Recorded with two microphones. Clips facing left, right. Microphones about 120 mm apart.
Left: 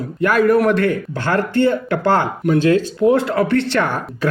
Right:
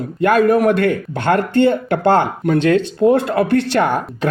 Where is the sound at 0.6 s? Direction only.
55° right (ahead or behind).